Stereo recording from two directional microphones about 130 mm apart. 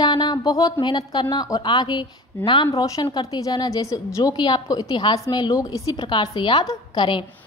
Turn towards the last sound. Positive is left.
turn(degrees=40)  # may be behind; listen again after turning